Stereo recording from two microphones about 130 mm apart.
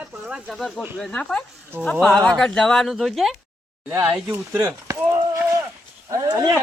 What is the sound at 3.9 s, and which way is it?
Speech, 15° right (ahead or behind).